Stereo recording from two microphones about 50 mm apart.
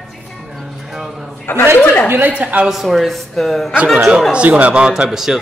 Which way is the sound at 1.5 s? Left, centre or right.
Left.